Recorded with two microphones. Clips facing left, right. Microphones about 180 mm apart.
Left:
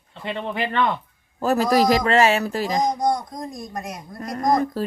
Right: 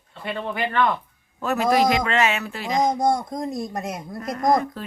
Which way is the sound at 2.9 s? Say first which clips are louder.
Right 1 dB; 25° right (ahead or behind).